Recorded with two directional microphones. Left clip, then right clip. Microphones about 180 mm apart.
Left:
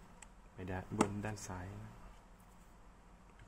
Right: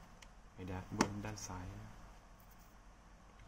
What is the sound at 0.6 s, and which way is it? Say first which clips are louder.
Speech: left 2 dB; 30° left (ahead or behind).